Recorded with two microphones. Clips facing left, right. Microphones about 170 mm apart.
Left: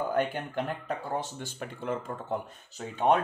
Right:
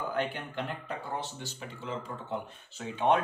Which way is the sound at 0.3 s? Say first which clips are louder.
Left 4 dB; 45° left (ahead or behind).